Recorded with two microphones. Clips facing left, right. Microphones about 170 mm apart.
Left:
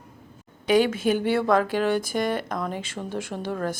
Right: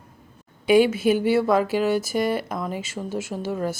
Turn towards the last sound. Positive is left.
turn(degrees=-5)  # may be behind; listen again after turning